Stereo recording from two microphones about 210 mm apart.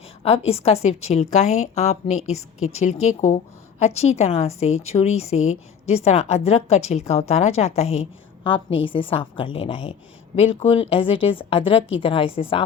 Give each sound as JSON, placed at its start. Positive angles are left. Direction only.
{"t": 0.2, "sound": "a woman's voice", "side_deg": 30}